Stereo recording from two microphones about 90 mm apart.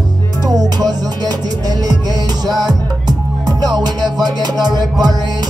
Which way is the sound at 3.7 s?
50° right (ahead or behind).